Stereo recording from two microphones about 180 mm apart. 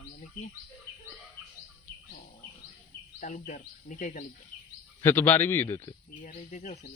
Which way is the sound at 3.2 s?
45° left (ahead or behind).